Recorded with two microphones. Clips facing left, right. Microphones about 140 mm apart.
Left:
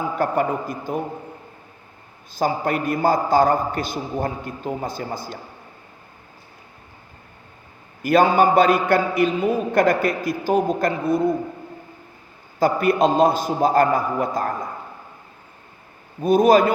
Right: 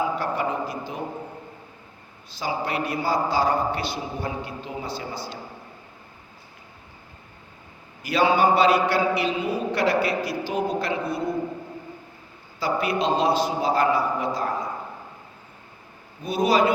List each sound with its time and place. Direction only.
0.2 s a man's voice: 50° left (ahead or behind)
2.3 s a man's voice: 50° left (ahead or behind)
8.0 s a man's voice: 50° left (ahead or behind)
12.5 s a man's voice: 50° left (ahead or behind)
16.2 s a man's voice: 50° left (ahead or behind)